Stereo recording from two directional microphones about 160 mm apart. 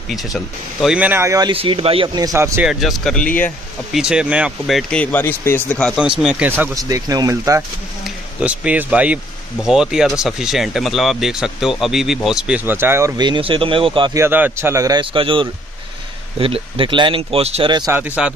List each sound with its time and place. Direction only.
0.1 s speech: centre (ahead or behind); by 1.5 s 20° right (ahead or behind)
1.5 s speech: 35° right (ahead or behind)
2.1 s speech: 20° right (ahead or behind)
2.6 s speech: centre (ahead or behind)
3.9 s speech: 5° right (ahead or behind)
5.9 s speech: 5° right (ahead or behind)
6.8 s a man's voice: 20° right (ahead or behind)
8.0 s speech: 5° right (ahead or behind)
13.2 s speech: 30° right (ahead or behind)
14.1 s a man's voice: 15° right (ahead or behind)
17.9 s speech: 10° right (ahead or behind)